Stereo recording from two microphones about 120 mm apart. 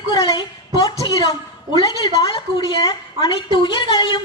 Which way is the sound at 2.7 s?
35° left (ahead or behind).